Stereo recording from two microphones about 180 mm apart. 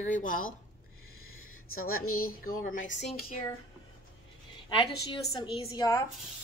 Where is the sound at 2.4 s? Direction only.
50° left (ahead or behind).